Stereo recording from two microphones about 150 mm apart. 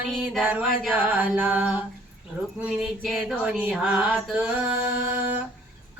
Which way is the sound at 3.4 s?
5° right (ahead or behind).